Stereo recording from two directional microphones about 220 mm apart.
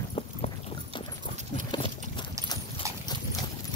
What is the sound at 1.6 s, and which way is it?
Horse, 20° left (ahead or behind).